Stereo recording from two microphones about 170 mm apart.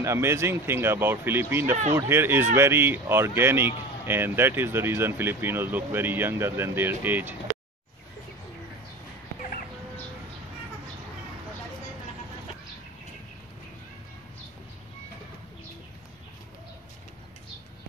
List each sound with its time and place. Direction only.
0.0 s speech: 15° right (ahead or behind)